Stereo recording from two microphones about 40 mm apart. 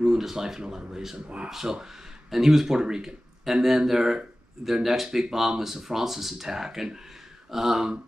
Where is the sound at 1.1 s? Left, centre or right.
Right.